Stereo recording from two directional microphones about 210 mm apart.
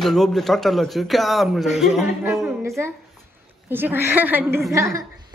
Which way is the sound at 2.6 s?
15° right (ahead or behind).